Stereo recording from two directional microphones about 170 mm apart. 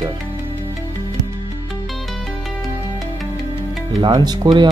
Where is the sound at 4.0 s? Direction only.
25° right (ahead or behind).